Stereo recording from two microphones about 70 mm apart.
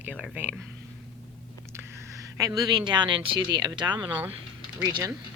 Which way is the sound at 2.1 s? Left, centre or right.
Right.